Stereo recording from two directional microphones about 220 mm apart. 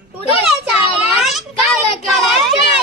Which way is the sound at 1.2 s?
Centre (ahead or behind).